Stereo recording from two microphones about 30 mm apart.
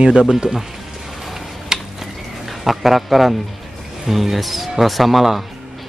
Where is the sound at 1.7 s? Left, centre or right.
Right.